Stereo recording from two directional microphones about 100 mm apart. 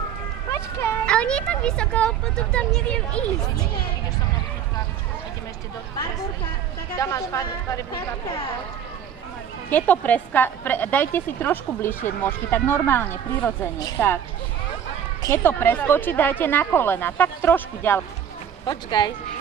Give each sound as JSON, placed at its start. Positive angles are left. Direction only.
{"t": 0.5, "sound": "a sound", "side_deg": 30}
{"t": 1.0, "sound": "speech", "side_deg": 10}
{"t": 7.0, "sound": "speech", "side_deg": 35}
{"t": 9.7, "sound": "a woman's voice", "side_deg": 15}
{"t": 15.2, "sound": "a woman's voice", "side_deg": 25}
{"t": 18.9, "sound": "speech", "side_deg": 50}